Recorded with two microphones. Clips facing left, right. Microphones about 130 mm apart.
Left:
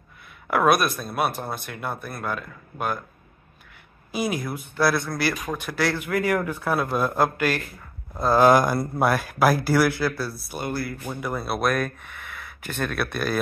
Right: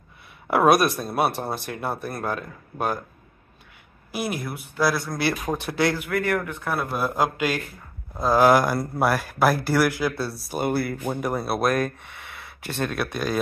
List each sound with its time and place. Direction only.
0.5 s speech: 30° right (ahead or behind)
4.1 s a man's voice: 5° right (ahead or behind)
5.5 s speech: 25° right (ahead or behind)
6.1 s a man's voice: 10° left (ahead or behind)
10.6 s speech: 60° right (ahead or behind)
11.1 s speech: 40° right (ahead or behind); by 13.4 s 15° right (ahead or behind)